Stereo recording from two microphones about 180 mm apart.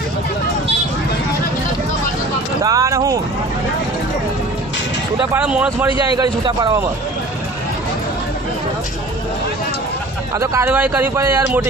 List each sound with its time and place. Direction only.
2.6 s speech: 20° right (ahead or behind)
5.3 s speech: 5° right (ahead or behind)
6.1 s a man's voice: 25° right (ahead or behind)
10.3 s speech: 15° right (ahead or behind)